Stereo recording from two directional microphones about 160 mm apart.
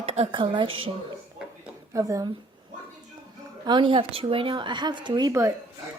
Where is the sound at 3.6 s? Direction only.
30° right (ahead or behind).